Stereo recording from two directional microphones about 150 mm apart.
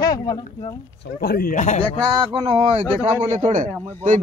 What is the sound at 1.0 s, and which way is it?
Speech, 90° left.